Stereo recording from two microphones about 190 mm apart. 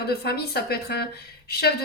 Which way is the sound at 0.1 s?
55° left (ahead or behind).